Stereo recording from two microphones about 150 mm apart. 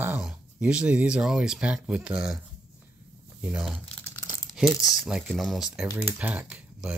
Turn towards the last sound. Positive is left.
turn(degrees=-5)  # may be behind; listen again after turning